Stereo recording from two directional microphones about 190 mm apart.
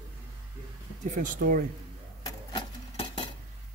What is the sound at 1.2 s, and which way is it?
Speech, 45° right (ahead or behind).